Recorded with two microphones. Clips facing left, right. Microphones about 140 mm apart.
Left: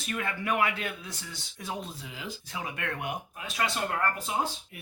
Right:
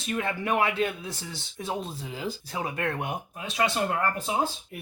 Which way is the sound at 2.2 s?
35° right (ahead or behind).